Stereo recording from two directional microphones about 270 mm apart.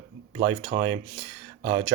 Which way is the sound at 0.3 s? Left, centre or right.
Right.